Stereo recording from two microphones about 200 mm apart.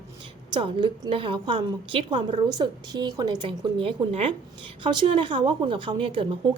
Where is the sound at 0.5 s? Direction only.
20° right (ahead or behind).